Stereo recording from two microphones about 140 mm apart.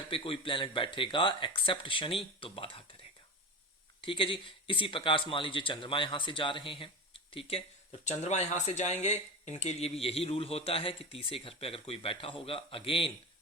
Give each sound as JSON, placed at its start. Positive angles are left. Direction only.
{"t": 0.1, "sound": "speech", "side_deg": 40}
{"t": 4.0, "sound": "speech", "side_deg": 35}
{"t": 8.0, "sound": "speech", "side_deg": 55}